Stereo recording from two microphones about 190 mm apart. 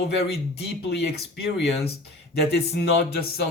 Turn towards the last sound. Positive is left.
turn(degrees=55)  # may be behind; listen again after turning